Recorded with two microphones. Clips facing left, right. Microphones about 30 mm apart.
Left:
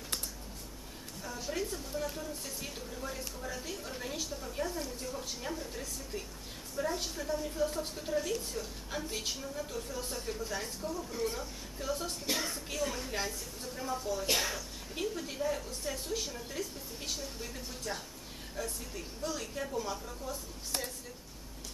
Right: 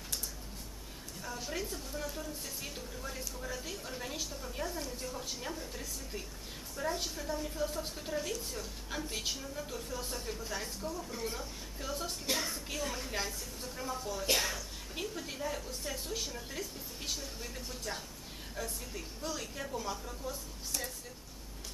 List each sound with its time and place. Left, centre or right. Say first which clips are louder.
1.2 s a woman's voice: left 2 dB; centre
20.7 s a woman's voice: left 2 dB; left